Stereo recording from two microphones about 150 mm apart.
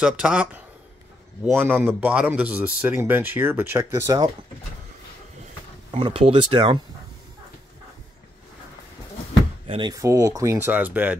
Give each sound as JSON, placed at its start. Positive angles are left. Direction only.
{"t": 0.0, "sound": "speech", "side_deg": -5}
{"t": 5.9, "sound": "speech", "side_deg": -35}
{"t": 9.7, "sound": "speech", "side_deg": -30}
{"t": 9.9, "sound": "speech", "side_deg": -20}